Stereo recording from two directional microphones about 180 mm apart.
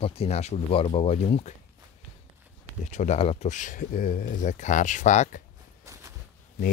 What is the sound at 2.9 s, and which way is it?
Speech, 40° left (ahead or behind).